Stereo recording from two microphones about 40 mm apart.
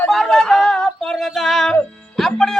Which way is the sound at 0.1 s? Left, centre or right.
Centre.